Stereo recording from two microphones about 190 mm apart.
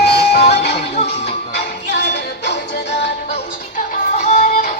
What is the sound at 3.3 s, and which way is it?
Music, 45° left (ahead or behind).